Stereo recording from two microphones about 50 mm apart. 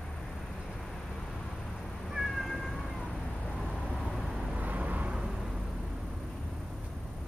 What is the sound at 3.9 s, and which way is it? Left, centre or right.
Vehicle, centre.